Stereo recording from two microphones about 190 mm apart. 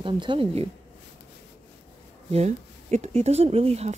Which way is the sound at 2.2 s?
35° right (ahead or behind).